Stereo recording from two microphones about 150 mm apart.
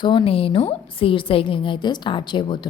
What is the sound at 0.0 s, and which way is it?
A woman's voice, 35° left (ahead or behind).